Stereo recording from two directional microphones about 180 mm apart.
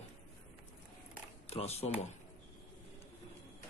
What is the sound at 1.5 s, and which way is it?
Speech, 35° left (ahead or behind).